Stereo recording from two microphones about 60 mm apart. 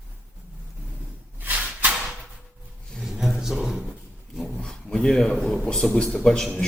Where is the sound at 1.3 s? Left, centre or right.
Right.